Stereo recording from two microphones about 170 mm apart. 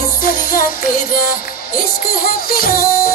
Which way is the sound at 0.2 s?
60° left (ahead or behind).